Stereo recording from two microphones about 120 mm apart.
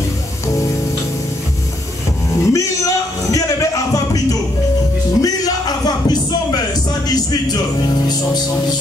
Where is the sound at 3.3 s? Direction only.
30° left (ahead or behind).